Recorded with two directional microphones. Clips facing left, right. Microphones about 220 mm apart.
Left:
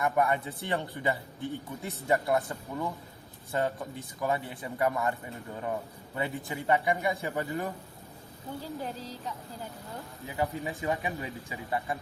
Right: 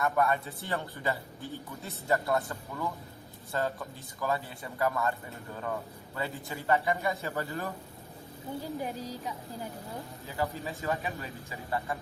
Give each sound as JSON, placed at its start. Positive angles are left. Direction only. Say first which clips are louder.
{"t": 0.0, "sound": "a man's voice", "louder": "left 1 dB", "side_deg": 15}
{"t": 8.6, "sound": "a woman's voice", "louder": "right 2 dB", "side_deg": -15}
{"t": 10.2, "sound": "a man's voice", "louder": "left 2 dB", "side_deg": 15}